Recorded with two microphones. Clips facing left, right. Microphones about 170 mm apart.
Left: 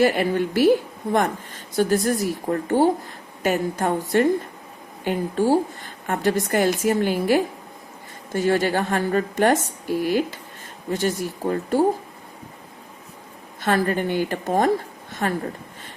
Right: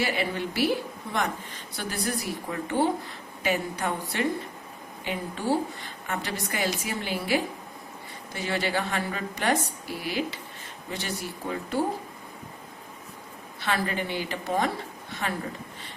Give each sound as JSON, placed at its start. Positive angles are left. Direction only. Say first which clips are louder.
{"t": 0.0, "sound": "a woman's voice", "louder": "left 9 dB", "side_deg": 50}
{"t": 13.6, "sound": "a woman's voice", "louder": "left 7 dB", "side_deg": 45}